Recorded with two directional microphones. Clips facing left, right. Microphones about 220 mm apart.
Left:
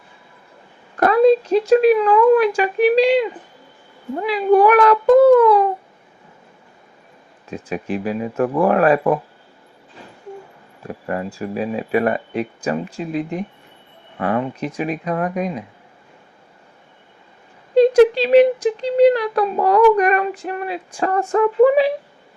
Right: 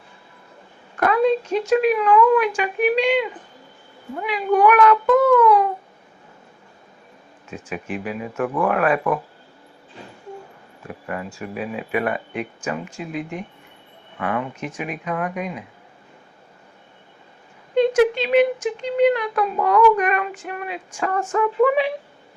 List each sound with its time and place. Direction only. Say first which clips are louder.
0.9 s speech: left 5 dB; 35° left (ahead or behind)
7.5 s speech: left 5 dB; 35° left (ahead or behind)
10.8 s speech: left 5 dB; 35° left (ahead or behind)
17.7 s speech: left 5 dB; 35° left (ahead or behind)